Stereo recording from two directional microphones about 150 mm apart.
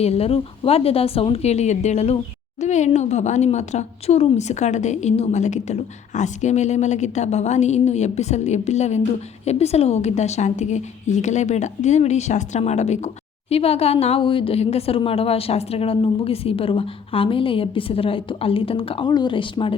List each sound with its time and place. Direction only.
0.0 s a woman's voice: 40° left (ahead or behind)